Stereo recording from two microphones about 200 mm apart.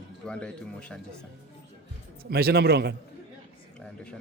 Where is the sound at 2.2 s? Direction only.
50° right (ahead or behind).